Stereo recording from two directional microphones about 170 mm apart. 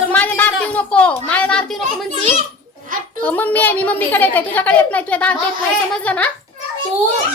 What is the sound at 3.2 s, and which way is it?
A child's voice, 10° left (ahead or behind).